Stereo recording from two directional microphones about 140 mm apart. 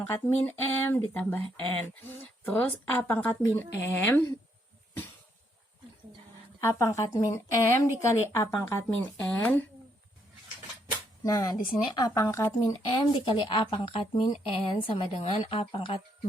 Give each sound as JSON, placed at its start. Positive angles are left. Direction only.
{"t": 0.0, "sound": "speech", "side_deg": 15}
{"t": 6.6, "sound": "a woman's voice", "side_deg": 20}
{"t": 11.2, "sound": "speech", "side_deg": 25}